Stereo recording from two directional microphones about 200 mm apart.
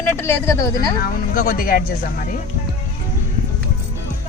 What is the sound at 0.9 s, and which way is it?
Speech, 45° left (ahead or behind).